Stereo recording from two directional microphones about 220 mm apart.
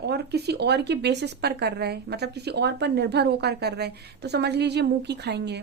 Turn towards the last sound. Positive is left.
turn(degrees=-50)  # may be behind; listen again after turning